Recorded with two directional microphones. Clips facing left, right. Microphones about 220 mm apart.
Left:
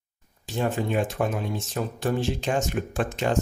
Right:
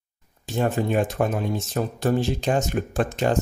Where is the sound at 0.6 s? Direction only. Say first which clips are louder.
Right 3 dB; 45° right (ahead or behind).